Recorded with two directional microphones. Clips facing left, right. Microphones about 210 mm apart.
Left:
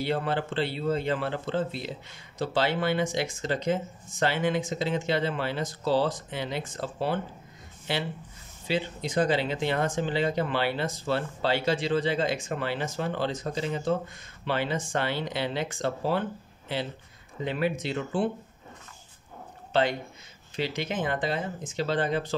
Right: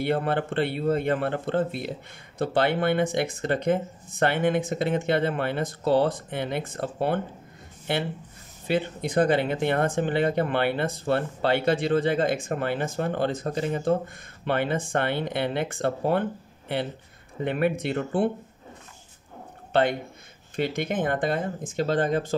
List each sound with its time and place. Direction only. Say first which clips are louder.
0.0 s speech: right 3 dB; 55° right (ahead or behind)
19.7 s speech: right 3 dB; 55° right (ahead or behind)